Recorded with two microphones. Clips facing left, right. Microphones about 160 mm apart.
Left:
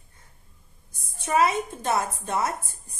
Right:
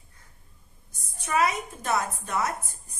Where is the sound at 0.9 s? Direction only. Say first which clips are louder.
Left 3 dB; 30° left (ahead or behind).